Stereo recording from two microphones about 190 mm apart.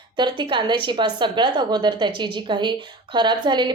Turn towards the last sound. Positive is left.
turn(degrees=-25)  # may be behind; listen again after turning